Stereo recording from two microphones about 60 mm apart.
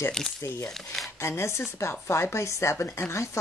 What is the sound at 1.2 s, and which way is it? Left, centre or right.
Speech, left.